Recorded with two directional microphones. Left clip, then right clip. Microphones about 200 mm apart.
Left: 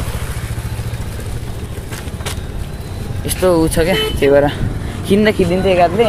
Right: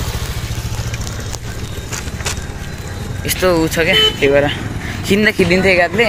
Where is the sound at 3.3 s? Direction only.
15° left (ahead or behind).